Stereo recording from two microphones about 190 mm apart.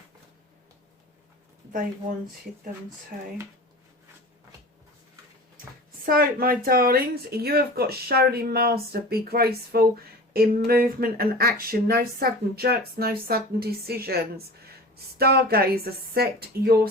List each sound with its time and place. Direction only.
6.1 s speech: 50° right (ahead or behind)